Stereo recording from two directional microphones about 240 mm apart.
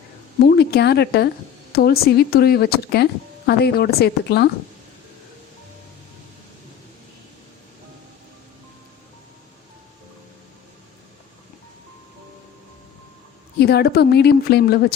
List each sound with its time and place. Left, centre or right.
0.3 s a woman's voice: left
13.6 s a woman's voice: left